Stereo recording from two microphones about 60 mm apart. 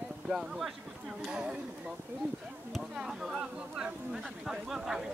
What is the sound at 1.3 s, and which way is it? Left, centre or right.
Speech, centre.